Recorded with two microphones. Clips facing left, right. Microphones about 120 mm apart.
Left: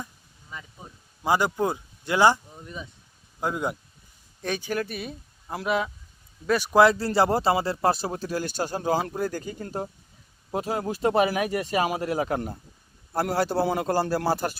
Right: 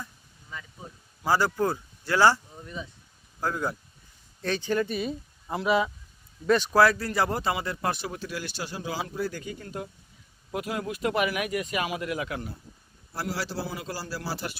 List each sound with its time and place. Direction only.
1.2 s speech: 20° left (ahead or behind); by 5.9 s centre (ahead or behind)
6.5 s speech: 15° left (ahead or behind); by 12.4 s 35° left (ahead or behind)
13.1 s a man's voice: 50° left (ahead or behind)